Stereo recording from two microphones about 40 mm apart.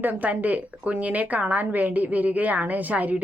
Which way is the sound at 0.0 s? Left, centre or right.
Right.